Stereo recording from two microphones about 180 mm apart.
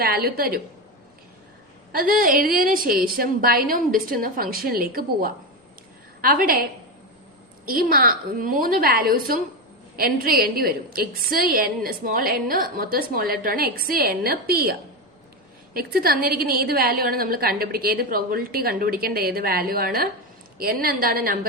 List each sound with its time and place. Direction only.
0.0 s a woman's voice: 60° right (ahead or behind)
1.9 s a woman's voice: 55° right (ahead or behind)
7.7 s a woman's voice: 55° right (ahead or behind)